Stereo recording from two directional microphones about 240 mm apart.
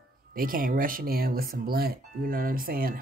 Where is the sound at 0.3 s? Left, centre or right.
Right.